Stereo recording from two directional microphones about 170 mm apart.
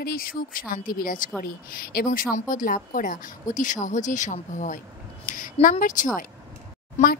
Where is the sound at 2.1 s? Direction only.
50° left (ahead or behind).